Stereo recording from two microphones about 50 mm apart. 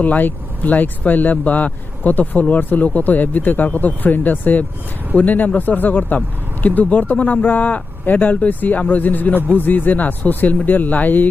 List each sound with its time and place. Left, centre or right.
0.0 s speech: left